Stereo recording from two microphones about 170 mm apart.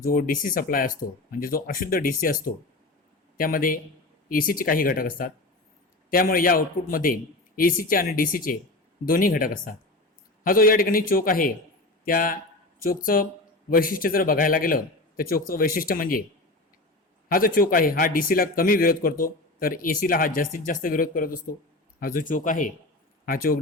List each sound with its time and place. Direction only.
0.0 s speech: 55° left (ahead or behind)
17.2 s speech: 60° left (ahead or behind)